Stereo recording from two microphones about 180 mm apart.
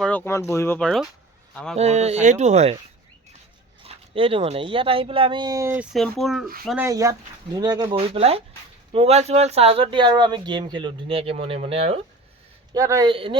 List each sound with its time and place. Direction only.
0.0 s speech: 10° left (ahead or behind)
0.8 s speech: 5° left (ahead or behind)
1.7 s speech: 35° right (ahead or behind)
3.8 s speech: 30° right (ahead or behind); by 6.5 s centre (ahead or behind)
6.8 s speech: 20° right (ahead or behind); by 12.0 s 35° right (ahead or behind)
12.7 s speech: 20° right (ahead or behind)
13.1 s speech: 30° right (ahead or behind)